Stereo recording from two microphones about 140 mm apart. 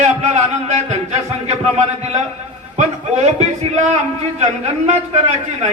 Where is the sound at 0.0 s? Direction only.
55° right (ahead or behind).